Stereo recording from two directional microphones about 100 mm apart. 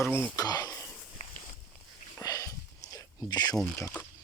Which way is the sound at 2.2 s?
35° left (ahead or behind).